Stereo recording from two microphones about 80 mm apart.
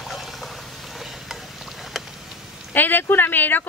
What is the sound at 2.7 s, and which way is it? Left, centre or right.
Speech, left.